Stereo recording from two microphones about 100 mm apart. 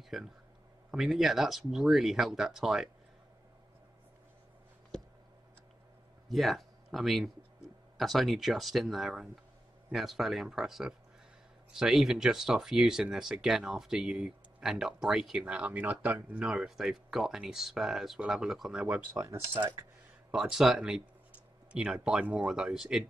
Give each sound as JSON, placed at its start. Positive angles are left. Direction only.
{"t": 0.1, "sound": "speech", "side_deg": 0}
{"t": 6.2, "sound": "speech", "side_deg": 0}
{"t": 19.1, "sound": "speech", "side_deg": -25}
{"t": 20.2, "sound": "speech", "side_deg": -5}